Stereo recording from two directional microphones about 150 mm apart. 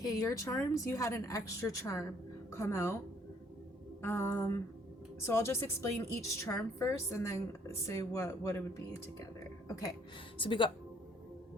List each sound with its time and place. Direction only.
0.0 s speech: 25° left (ahead or behind)
4.0 s a woman's voice: 15° left (ahead or behind)
10.3 s speech: 35° left (ahead or behind)